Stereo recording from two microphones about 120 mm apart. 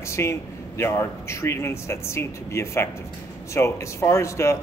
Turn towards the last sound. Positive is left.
turn(degrees=25)  # may be behind; listen again after turning